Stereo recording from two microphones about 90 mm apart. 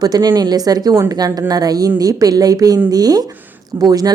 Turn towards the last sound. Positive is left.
turn(degrees=-50)  # may be behind; listen again after turning